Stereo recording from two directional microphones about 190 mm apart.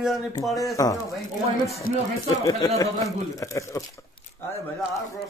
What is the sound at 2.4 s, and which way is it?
Speech, 15° left (ahead or behind).